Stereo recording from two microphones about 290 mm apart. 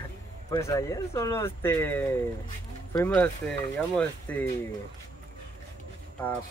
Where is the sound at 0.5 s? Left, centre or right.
Centre.